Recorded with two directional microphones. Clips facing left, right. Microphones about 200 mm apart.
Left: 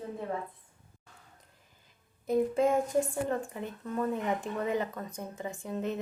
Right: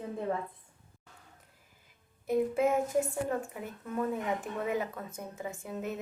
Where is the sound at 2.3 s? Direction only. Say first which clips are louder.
Left 1 dB; 5° right (ahead or behind).